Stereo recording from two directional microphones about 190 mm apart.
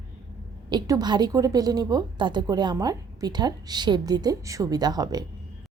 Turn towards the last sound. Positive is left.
turn(degrees=-20)  # may be behind; listen again after turning